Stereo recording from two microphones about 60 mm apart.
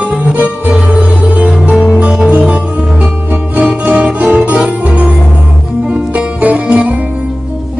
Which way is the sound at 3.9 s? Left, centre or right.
Right.